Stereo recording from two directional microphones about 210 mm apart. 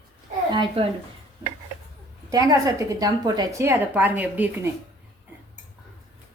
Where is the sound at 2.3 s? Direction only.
15° right (ahead or behind).